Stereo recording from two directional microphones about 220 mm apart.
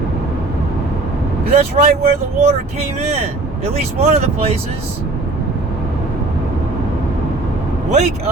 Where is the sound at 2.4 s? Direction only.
30° right (ahead or behind).